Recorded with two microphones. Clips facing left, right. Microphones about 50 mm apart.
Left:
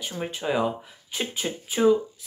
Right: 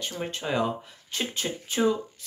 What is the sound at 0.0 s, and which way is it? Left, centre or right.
Speech, centre.